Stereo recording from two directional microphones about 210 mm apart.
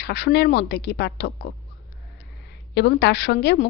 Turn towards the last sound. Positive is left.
turn(degrees=50)  # may be behind; listen again after turning